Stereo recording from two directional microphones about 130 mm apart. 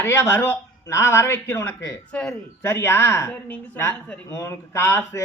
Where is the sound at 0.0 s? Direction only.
20° left (ahead or behind).